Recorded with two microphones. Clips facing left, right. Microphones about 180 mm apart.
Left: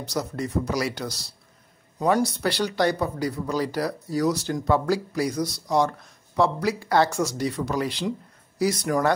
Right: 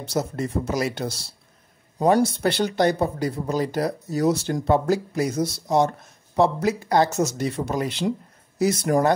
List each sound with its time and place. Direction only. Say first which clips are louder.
0.1 s speech: right 2 dB; 25° right (ahead or behind)